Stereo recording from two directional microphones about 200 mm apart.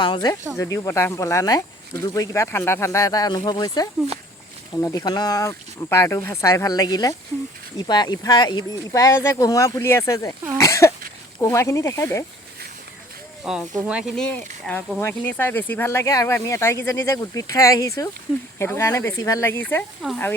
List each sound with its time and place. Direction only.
0.0 s speech: 20° left (ahead or behind)
13.4 s speech: 5° right (ahead or behind)
20.0 s speech: centre (ahead or behind)